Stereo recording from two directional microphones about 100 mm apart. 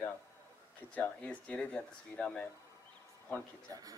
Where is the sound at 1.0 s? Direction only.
10° left (ahead or behind).